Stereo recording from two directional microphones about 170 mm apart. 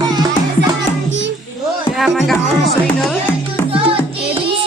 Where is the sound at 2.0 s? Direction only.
Centre (ahead or behind).